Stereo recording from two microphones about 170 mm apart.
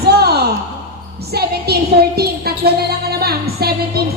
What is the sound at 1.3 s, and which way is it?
A woman's voice, 70° right (ahead or behind).